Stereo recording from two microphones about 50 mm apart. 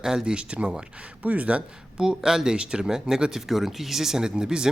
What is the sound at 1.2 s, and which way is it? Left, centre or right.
Speech, right.